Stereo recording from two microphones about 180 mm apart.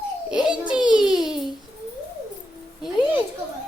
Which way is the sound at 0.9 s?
5° right (ahead or behind).